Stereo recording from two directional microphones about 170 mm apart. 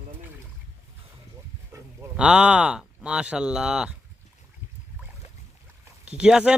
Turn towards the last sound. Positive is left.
turn(degrees=-5)  # may be behind; listen again after turning